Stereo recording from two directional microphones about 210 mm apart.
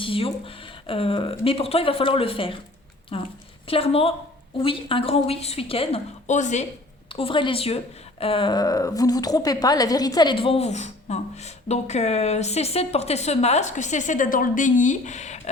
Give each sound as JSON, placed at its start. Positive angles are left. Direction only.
{"t": 0.0, "sound": "a woman's voice", "side_deg": 25}